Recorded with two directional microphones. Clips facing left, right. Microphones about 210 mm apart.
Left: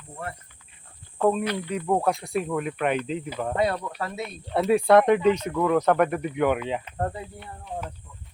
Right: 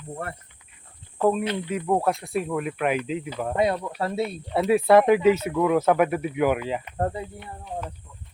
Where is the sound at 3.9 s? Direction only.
30° right (ahead or behind).